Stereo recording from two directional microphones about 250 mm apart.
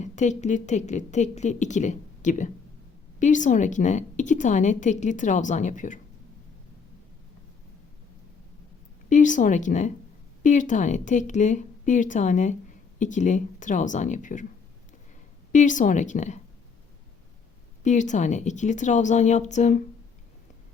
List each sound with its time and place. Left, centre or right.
0.0 s a woman's voice: left
9.0 s a woman's voice: left
15.5 s a woman's voice: left
17.8 s a woman's voice: left